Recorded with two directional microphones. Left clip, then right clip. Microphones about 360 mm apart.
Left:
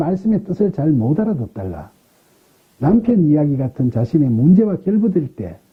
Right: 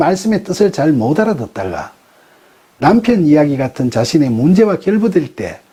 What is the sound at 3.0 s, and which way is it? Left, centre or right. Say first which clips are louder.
Speech: right 5 dB; centre.